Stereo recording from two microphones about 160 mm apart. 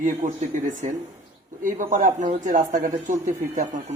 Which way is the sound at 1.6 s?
55° right (ahead or behind).